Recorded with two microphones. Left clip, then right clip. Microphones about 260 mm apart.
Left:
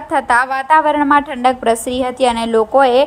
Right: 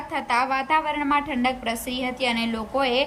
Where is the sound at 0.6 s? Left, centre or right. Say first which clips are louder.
Left 11 dB; left.